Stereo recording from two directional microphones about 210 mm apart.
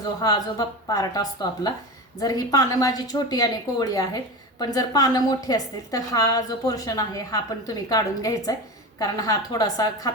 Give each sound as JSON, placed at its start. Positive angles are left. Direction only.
{"t": 0.2, "sound": "a woman's voice", "side_deg": 20}